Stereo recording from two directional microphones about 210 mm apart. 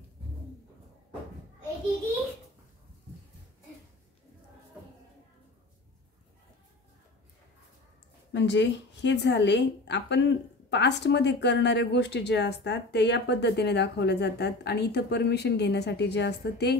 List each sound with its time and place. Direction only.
8.3 s speech: 60° left (ahead or behind)